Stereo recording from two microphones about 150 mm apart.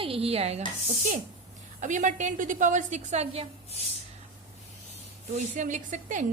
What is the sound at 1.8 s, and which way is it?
A woman's voice, 55° right (ahead or behind).